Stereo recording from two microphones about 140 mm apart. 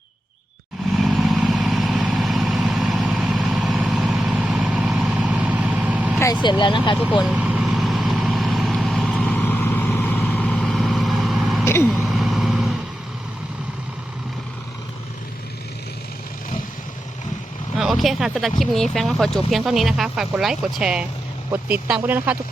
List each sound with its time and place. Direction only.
0.9 s vehicle: centre (ahead or behind)
6.4 s speech: 35° left (ahead or behind)
7.3 s vehicle: 10° right (ahead or behind)
11.6 s vehicle: 15° left (ahead or behind)
12.0 s vehicle: centre (ahead or behind)
17.7 s a sound: centre (ahead or behind)
18.6 s speech: centre (ahead or behind)